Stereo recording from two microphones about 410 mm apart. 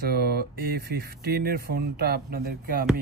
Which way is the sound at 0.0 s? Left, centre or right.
Right.